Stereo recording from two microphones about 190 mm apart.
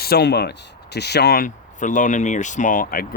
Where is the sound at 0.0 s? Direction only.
60° left (ahead or behind).